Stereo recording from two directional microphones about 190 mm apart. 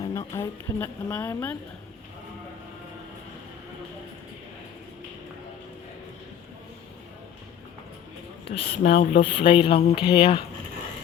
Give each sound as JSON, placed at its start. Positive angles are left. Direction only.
{"t": 0.0, "sound": "a woman's voice", "side_deg": 15}
{"t": 8.4, "sound": "a woman's voice", "side_deg": 30}